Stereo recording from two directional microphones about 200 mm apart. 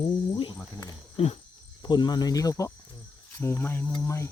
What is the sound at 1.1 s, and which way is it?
Cricket, 30° left (ahead or behind).